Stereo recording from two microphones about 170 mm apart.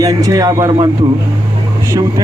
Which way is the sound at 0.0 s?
20° right (ahead or behind).